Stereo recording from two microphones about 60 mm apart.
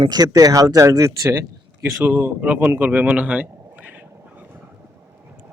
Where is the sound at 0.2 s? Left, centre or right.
Right.